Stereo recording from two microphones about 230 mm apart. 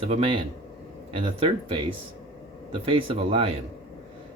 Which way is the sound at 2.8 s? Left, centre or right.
Right.